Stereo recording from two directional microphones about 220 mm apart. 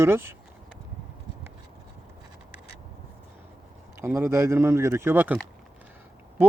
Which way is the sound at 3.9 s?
10° right (ahead or behind).